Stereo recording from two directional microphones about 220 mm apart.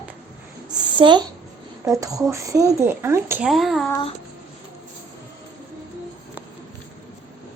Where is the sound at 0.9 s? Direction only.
20° right (ahead or behind); by 3.9 s centre (ahead or behind).